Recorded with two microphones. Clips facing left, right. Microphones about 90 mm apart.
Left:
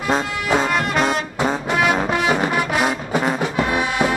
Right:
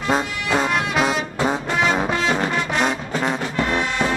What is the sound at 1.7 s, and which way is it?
Music, 10° left (ahead or behind).